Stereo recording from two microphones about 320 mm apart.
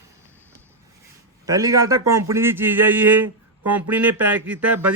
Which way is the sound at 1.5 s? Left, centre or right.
Centre.